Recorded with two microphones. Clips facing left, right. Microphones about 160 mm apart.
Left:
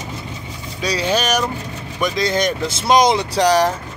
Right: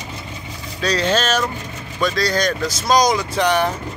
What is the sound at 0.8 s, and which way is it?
Speech, 10° left (ahead or behind).